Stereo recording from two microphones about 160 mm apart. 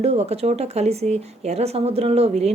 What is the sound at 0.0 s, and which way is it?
A woman's voice, 40° right (ahead or behind).